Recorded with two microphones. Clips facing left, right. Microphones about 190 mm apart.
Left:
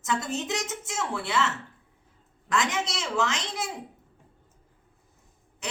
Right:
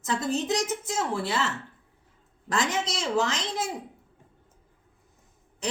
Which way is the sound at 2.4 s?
35° right (ahead or behind).